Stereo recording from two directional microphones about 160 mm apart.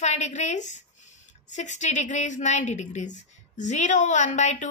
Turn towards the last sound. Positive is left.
turn(degrees=45)  # may be behind; listen again after turning